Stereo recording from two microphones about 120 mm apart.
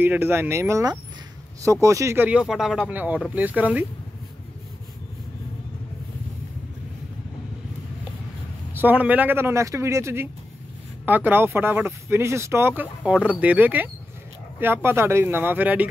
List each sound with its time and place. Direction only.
0.0 s speech: 15° right (ahead or behind)
2.2 s speech: 5° right (ahead or behind)
2.9 s speech: 15° right (ahead or behind)
8.7 s speech: 15° right (ahead or behind)